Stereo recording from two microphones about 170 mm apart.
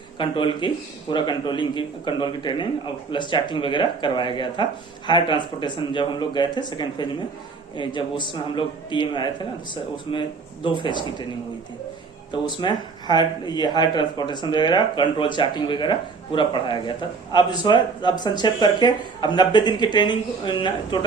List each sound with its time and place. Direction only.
0.2 s a man's voice: 30° left (ahead or behind)
12.3 s a man's voice: 25° left (ahead or behind)